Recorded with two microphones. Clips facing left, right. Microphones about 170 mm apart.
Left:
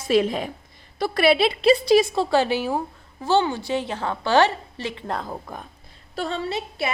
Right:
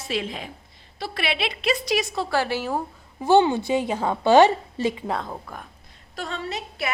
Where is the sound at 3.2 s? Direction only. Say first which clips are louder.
Right 3 dB; 15° right (ahead or behind).